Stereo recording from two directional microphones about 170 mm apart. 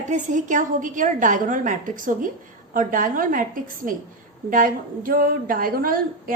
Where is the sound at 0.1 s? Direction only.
45° right (ahead or behind).